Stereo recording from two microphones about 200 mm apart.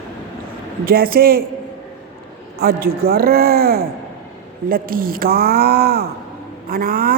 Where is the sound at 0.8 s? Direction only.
45° right (ahead or behind).